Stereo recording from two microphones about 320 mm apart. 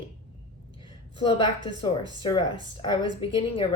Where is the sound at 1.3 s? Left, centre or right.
Centre.